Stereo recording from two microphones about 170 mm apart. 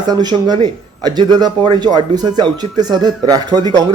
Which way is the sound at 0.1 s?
25° right (ahead or behind).